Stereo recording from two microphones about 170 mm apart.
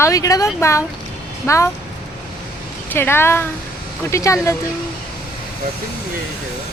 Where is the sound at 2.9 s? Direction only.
15° left (ahead or behind).